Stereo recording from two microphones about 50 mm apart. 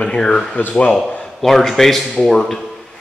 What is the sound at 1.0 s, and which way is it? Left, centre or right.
Speech, centre.